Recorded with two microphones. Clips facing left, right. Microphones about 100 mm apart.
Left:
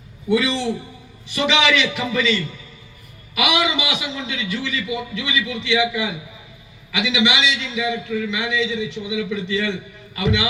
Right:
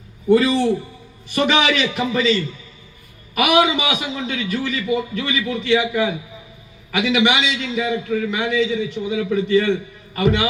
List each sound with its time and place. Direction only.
0.3 s a man's voice: 45° right (ahead or behind)